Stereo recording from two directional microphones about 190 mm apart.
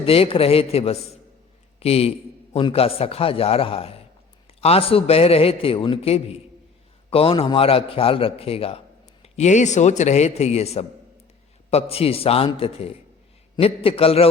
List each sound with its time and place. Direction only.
0.0 s a man's voice: 30° left (ahead or behind)